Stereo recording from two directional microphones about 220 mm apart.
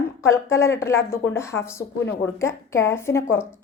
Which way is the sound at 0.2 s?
15° left (ahead or behind).